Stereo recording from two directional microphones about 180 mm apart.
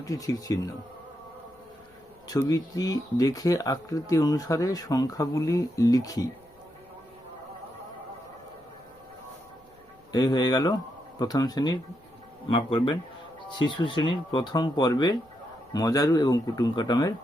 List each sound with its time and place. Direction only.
0.0 s speech: 20° left (ahead or behind)
2.5 s speech: 20° left (ahead or behind)
10.1 s speech: 20° left (ahead or behind)